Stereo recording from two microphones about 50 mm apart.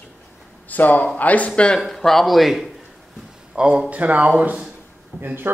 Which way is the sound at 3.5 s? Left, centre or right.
Right.